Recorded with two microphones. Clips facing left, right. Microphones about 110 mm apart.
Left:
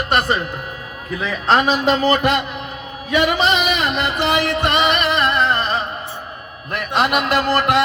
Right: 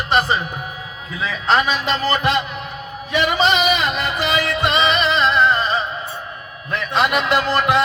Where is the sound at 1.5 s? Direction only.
45° left (ahead or behind).